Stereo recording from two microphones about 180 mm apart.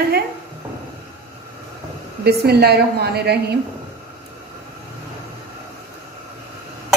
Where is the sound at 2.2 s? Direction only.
60° right (ahead or behind).